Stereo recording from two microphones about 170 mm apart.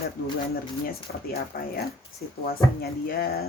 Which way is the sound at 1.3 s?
65° left (ahead or behind).